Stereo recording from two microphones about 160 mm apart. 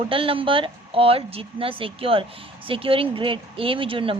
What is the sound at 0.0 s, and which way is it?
Speech, 35° right (ahead or behind).